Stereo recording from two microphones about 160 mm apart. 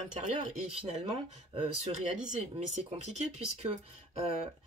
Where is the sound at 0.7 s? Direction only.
35° right (ahead or behind).